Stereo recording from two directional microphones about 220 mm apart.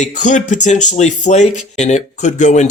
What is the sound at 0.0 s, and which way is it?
Speech, 35° left (ahead or behind).